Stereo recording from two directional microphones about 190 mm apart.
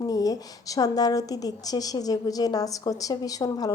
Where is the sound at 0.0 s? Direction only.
20° left (ahead or behind).